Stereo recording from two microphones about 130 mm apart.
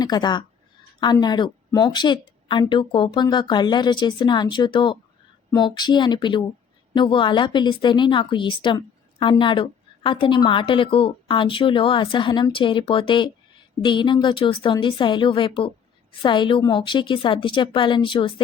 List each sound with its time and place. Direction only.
0.0 s a woman's voice: 35° left (ahead or behind)